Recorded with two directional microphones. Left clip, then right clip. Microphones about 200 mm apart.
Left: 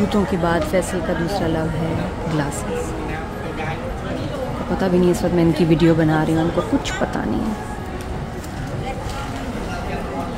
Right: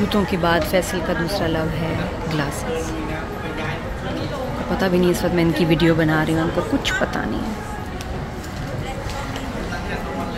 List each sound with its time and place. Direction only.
0.1 s speech: 10° left (ahead or behind)
4.7 s speech: 15° left (ahead or behind)